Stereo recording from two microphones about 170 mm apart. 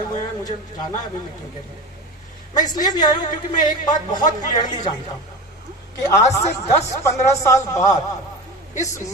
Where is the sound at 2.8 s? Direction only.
25° left (ahead or behind).